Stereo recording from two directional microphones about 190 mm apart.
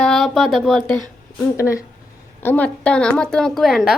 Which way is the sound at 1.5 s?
15° left (ahead or behind).